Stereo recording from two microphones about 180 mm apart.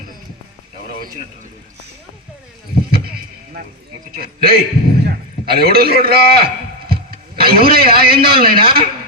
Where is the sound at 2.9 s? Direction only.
60° right (ahead or behind).